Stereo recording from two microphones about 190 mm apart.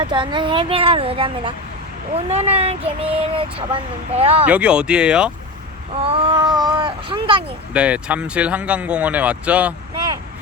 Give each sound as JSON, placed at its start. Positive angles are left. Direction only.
{"t": 0.0, "sound": "speech", "side_deg": -25}
{"t": 4.4, "sound": "speech", "side_deg": -5}
{"t": 5.9, "sound": "speech", "side_deg": -30}
{"t": 7.7, "sound": "speech", "side_deg": -5}